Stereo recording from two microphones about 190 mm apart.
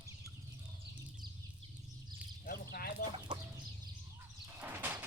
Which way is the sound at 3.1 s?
25° right (ahead or behind).